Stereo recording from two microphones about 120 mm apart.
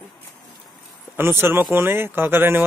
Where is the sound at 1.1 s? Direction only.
20° right (ahead or behind).